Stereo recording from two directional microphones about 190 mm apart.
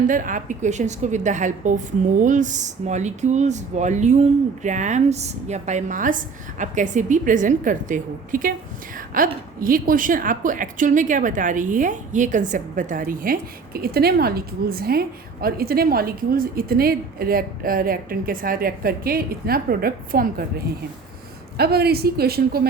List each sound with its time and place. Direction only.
0.1 s a woman's voice: 45° right (ahead or behind)
21.6 s a woman's voice: 55° right (ahead or behind)